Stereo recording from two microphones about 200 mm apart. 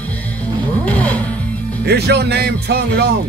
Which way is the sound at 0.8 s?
5° left (ahead or behind).